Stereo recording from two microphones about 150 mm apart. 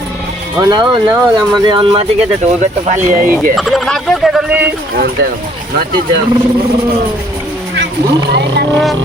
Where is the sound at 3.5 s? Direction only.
Centre (ahead or behind).